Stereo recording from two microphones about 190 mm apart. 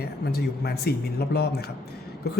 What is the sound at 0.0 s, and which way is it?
A man's voice, 55° left (ahead or behind).